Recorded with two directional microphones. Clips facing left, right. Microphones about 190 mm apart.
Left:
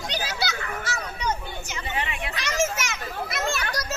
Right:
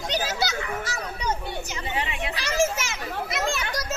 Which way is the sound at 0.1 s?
45° right (ahead or behind).